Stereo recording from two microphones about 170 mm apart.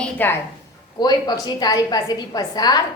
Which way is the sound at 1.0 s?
25° left (ahead or behind).